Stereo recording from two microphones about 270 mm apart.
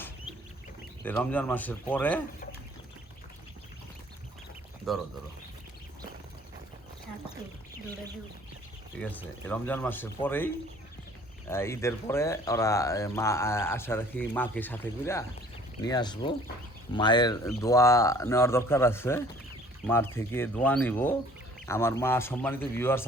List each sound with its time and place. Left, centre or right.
1.0 s speech: centre
4.9 s speech: centre
9.0 s speech: centre